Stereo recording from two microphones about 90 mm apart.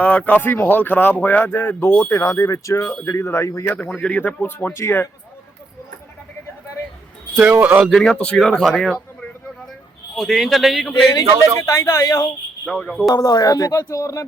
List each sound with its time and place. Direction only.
0.0 s speech: 15° left (ahead or behind)
2.1 s speech: 40° left (ahead or behind)
3.9 s a man's voice: 15° left (ahead or behind)
4.7 s speech: 30° left (ahead or behind)
7.3 s speech: 15° right (ahead or behind)
7.9 s a man's voice: 5° left (ahead or behind)
11.6 s speech: 30° left (ahead or behind)
12.6 s a man's voice: 10° left (ahead or behind)
13.1 s speech: 45° left (ahead or behind)